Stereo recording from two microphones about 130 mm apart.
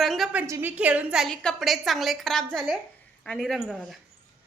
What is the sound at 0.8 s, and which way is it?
A woman's voice, 10° right (ahead or behind).